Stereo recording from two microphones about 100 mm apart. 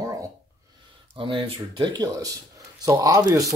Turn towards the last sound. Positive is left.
turn(degrees=-35)  # may be behind; listen again after turning